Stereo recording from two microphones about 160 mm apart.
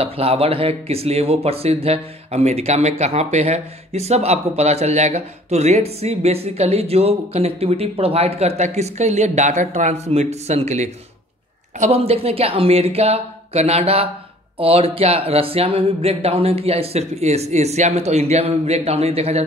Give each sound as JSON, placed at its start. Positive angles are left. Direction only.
{"t": 0.0, "sound": "speech", "side_deg": -35}